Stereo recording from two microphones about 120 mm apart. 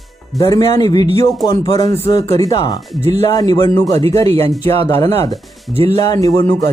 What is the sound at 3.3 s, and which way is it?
Speech, 35° left (ahead or behind).